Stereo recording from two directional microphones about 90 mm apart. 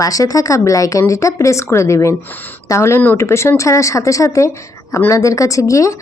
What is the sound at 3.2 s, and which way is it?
A woman's voice, 30° left (ahead or behind).